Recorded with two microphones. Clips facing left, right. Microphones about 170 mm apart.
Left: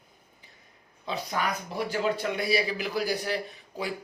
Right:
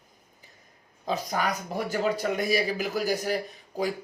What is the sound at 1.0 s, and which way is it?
Speech, 40° right (ahead or behind).